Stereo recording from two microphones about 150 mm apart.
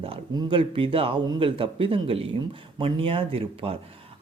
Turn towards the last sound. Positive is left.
turn(degrees=-40)  # may be behind; listen again after turning